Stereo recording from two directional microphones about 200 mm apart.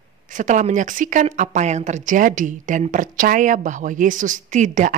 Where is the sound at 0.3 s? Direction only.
40° right (ahead or behind).